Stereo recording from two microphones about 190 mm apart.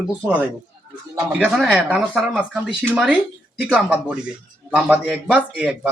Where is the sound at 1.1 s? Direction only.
5° right (ahead or behind).